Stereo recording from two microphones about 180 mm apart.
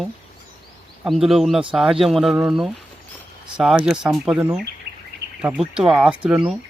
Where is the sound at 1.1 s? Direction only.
Centre (ahead or behind).